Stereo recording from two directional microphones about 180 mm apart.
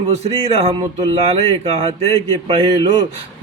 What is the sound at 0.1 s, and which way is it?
Speech, 35° right (ahead or behind).